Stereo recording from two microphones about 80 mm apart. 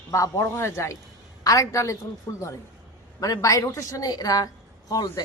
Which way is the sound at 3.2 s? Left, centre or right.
Left.